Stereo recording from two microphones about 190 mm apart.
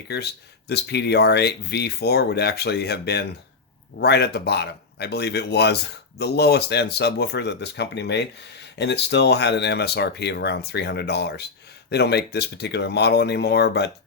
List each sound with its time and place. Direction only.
0.7 s speech: 60° left (ahead or behind)